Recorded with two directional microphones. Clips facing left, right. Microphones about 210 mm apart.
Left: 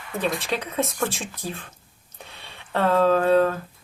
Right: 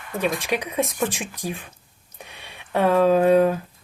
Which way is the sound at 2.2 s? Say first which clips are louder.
Right 1 dB; 15° right (ahead or behind).